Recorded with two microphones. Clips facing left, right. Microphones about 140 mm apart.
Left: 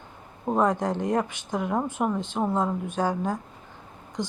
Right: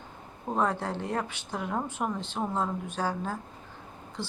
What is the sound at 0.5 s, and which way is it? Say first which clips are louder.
Speech: left 5 dB; 15° left (ahead or behind).